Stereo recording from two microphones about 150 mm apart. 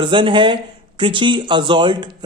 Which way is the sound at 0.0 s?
35° right (ahead or behind).